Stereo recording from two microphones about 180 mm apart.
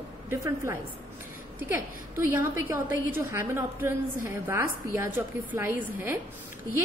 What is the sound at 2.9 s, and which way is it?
A woman's voice, 15° right (ahead or behind).